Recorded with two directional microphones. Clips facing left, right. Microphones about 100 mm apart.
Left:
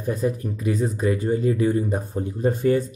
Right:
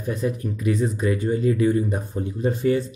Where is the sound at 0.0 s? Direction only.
40° left (ahead or behind).